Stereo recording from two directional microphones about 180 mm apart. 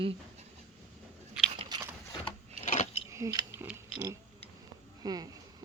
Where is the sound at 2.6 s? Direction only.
40° left (ahead or behind).